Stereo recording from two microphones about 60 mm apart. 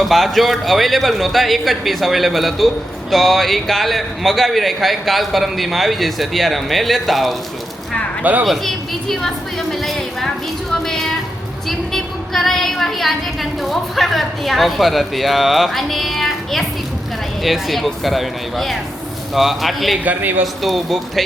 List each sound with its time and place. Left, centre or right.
0.0 s a woman's voice: centre
8.2 s speech: right
8.4 s a woman's voice: centre
10.7 s a sound: centre
11.7 s a woman's voice: centre